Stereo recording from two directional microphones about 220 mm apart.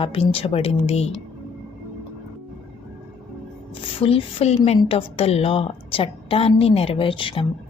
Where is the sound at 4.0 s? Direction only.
25° left (ahead or behind).